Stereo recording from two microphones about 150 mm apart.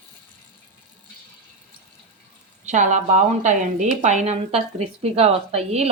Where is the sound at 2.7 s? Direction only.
50° right (ahead or behind).